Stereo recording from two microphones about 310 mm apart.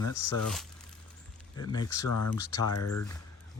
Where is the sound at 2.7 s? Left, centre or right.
Left.